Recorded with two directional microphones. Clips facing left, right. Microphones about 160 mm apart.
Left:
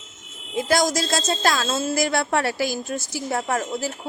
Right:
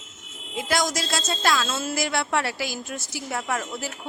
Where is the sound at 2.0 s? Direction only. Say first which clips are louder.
Left 2 dB; 40° left (ahead or behind).